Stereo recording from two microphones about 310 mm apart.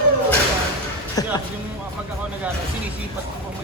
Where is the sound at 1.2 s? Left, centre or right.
Centre.